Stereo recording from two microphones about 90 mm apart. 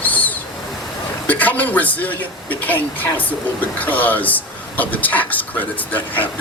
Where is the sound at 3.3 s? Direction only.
20° left (ahead or behind).